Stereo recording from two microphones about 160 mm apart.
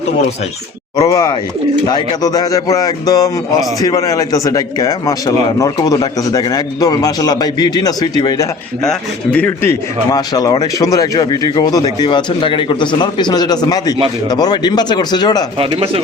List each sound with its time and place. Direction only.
0.9 s speech: 25° left (ahead or behind)
8.8 s a man's voice: 5° left (ahead or behind)
10.1 s speech: 25° left (ahead or behind)
15.5 s speech: 35° right (ahead or behind)